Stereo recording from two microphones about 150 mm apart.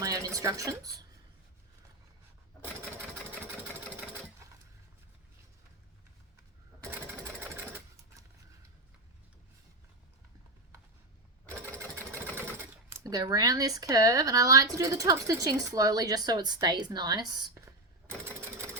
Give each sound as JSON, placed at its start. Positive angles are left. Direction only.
{"t": 0.0, "sound": "a sound", "side_deg": -20}
{"t": 11.8, "sound": "engine", "side_deg": -15}
{"t": 12.9, "sound": "speech", "side_deg": -20}